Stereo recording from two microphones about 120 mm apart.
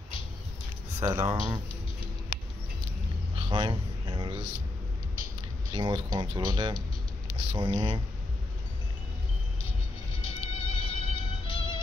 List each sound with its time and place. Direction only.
0.9 s speech: 25° right (ahead or behind)
3.3 s a sound: 40° right (ahead or behind)
5.7 s speech: 40° right (ahead or behind)
10.2 s music: 50° left (ahead or behind)